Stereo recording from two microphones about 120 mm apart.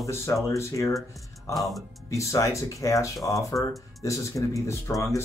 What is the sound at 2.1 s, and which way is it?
Speech, 25° left (ahead or behind).